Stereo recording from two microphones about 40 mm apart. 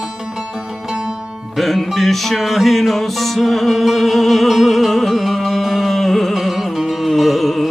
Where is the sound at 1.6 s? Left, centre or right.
Centre.